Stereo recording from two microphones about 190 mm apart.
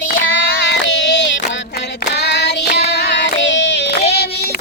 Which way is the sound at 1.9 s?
60° left (ahead or behind).